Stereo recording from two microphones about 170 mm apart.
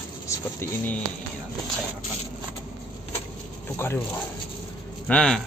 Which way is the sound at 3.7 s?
15° left (ahead or behind).